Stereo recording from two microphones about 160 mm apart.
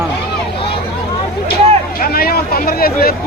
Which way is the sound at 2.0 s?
70° left (ahead or behind).